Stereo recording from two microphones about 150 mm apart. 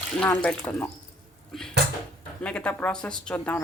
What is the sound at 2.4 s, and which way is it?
Speech, 10° left (ahead or behind).